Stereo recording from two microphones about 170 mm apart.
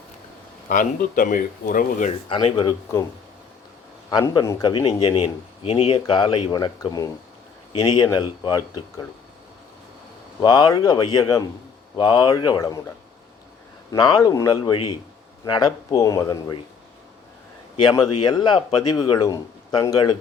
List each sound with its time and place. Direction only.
0.7 s speech: 50° left (ahead or behind)
2.3 s speech: 30° left (ahead or behind)
4.1 s speech: 20° left (ahead or behind)
10.4 s speech: 25° left (ahead or behind)
13.9 s speech: 20° left (ahead or behind)
17.8 s speech: 25° left (ahead or behind)